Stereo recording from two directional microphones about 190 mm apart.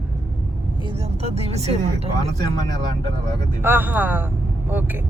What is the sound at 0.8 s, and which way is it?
Speech, 30° right (ahead or behind).